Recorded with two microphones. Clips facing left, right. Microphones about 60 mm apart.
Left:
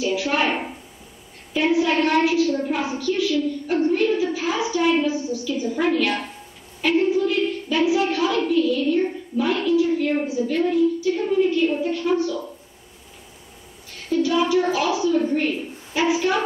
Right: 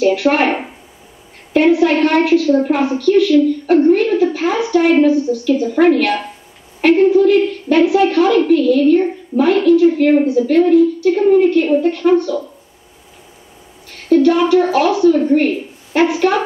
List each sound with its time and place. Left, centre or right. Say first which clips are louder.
0.0 s a woman's voice: right 8 dB; right
13.8 s a woman's voice: right 11 dB; right